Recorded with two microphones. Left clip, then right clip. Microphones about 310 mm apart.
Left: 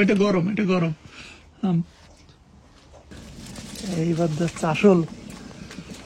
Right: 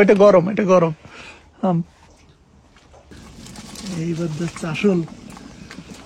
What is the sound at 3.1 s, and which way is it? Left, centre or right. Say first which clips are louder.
Pigeon: right 1 dB; centre.